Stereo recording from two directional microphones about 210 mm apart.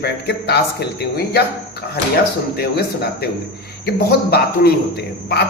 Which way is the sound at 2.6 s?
50° left (ahead or behind).